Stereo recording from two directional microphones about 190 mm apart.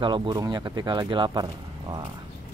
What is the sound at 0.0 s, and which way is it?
Speech, 25° right (ahead or behind).